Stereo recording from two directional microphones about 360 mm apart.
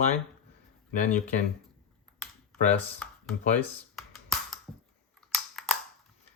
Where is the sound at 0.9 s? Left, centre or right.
Left.